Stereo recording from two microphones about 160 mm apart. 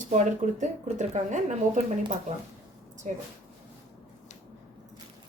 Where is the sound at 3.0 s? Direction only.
45° right (ahead or behind).